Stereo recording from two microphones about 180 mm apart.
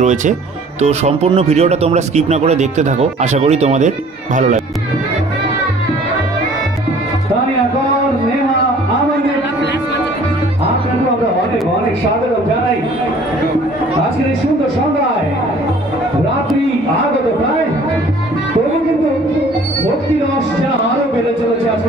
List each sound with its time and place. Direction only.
0.0 s speech: 40° right (ahead or behind)